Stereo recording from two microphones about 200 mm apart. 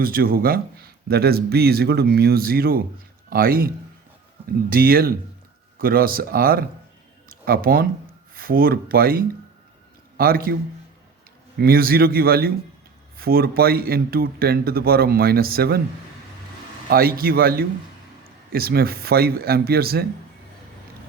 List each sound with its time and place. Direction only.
0.0 s a man's voice: 45° right (ahead or behind)
4.7 s a man's voice: 45° right (ahead or behind)
7.3 s a sound: 45° right (ahead or behind)
8.4 s a man's voice: 45° right (ahead or behind)
16.9 s a man's voice: 50° right (ahead or behind)